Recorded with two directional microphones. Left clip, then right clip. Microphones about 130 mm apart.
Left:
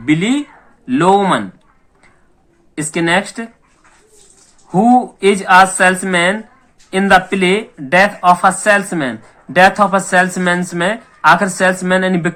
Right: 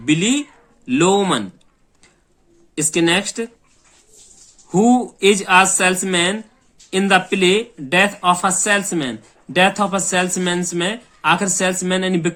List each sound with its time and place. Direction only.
0.0 s speech: 30° right (ahead or behind)
2.7 s speech: 30° right (ahead or behind)
4.7 s speech: 30° right (ahead or behind)